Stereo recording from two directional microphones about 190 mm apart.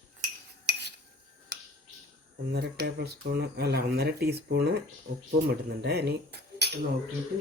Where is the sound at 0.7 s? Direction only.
60° right (ahead or behind).